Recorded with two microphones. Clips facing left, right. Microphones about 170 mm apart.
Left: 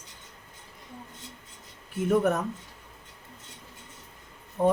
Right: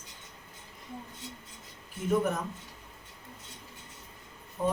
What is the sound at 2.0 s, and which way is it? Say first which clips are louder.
Speech: left 4 dB; 60° left (ahead or behind).